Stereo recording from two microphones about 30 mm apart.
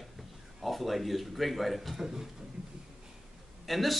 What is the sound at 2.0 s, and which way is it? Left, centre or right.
Speech, centre.